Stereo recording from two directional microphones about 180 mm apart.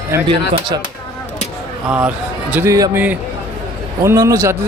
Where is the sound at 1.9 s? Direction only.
10° right (ahead or behind).